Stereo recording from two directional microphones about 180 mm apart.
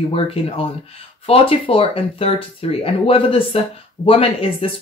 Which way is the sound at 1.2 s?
30° left (ahead or behind).